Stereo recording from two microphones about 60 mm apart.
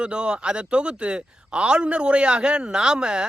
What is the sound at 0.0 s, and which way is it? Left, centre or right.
Speech, centre.